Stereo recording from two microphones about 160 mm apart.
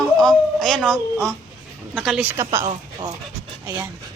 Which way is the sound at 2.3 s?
20° right (ahead or behind).